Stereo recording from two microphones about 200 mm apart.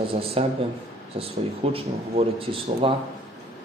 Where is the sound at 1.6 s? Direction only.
30° right (ahead or behind).